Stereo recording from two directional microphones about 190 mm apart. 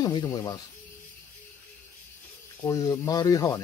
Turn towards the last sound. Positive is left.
turn(degrees=20)  # may be behind; listen again after turning